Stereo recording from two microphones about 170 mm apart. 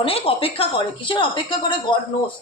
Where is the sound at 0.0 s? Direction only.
35° left (ahead or behind).